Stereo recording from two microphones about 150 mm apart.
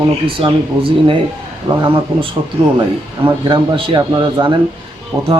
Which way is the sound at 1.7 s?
30° right (ahead or behind).